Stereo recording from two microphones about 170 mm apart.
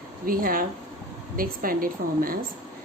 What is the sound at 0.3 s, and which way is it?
A woman's voice, 55° right (ahead or behind).